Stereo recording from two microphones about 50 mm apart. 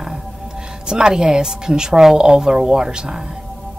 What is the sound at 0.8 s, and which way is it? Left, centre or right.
Speech, centre.